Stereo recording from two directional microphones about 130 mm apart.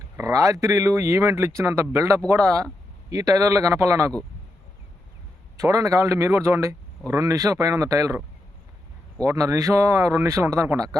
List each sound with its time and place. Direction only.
0.2 s speech: 25° right (ahead or behind)
5.5 s speech: 25° right (ahead or behind)
9.2 s speech: 25° right (ahead or behind)